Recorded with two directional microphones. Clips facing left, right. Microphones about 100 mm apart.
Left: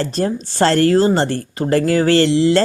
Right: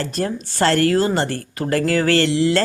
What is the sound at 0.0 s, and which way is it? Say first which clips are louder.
Speech: left 4 dB; 30° left (ahead or behind).